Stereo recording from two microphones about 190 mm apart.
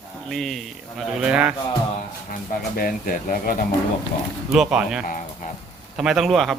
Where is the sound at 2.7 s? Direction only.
50° left (ahead or behind).